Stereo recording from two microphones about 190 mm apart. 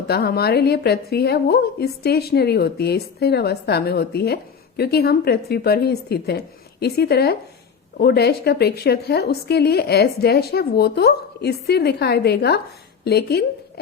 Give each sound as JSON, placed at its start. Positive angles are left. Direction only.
{"t": 0.1, "sound": "a woman's voice", "side_deg": 55}